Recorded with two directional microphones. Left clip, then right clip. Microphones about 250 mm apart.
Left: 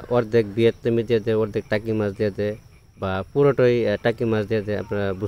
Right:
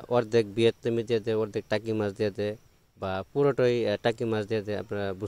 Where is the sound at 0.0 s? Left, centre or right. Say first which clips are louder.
Left 5 dB; right.